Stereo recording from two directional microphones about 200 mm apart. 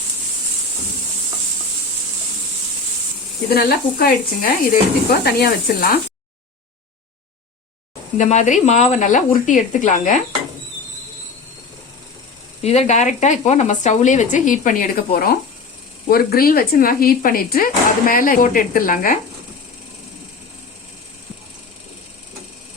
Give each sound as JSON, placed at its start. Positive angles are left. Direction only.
{"t": 3.5, "sound": "speech", "side_deg": 50}
{"t": 8.2, "sound": "speech", "side_deg": 35}
{"t": 12.6, "sound": "speech", "side_deg": 30}